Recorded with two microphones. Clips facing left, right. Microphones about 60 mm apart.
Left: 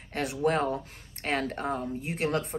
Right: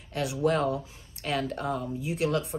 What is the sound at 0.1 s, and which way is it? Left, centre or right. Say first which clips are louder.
Speech: right 1 dB; left.